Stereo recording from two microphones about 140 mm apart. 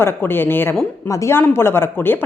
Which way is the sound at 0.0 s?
15° left (ahead or behind).